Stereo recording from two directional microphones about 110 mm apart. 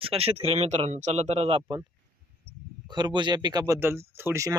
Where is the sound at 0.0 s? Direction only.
60° right (ahead or behind).